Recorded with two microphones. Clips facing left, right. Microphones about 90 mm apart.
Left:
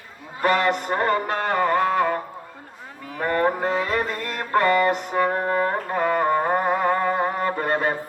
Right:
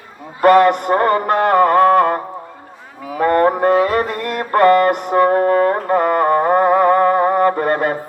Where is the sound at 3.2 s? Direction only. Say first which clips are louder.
Right 8 dB; 60° right (ahead or behind).